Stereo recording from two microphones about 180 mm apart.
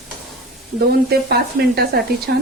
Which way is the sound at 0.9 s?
60° right (ahead or behind).